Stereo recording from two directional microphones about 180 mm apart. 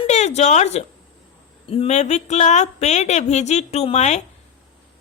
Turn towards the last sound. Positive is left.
turn(degrees=40)  # may be behind; listen again after turning